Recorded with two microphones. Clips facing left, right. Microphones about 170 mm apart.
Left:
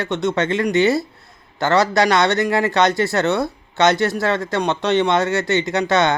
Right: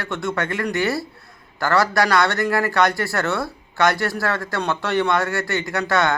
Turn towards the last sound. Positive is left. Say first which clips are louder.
# left 3 dB
turn(degrees=20)  # may be behind; listen again after turning